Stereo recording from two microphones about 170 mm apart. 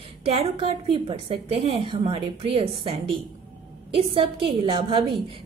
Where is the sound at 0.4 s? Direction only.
35° right (ahead or behind).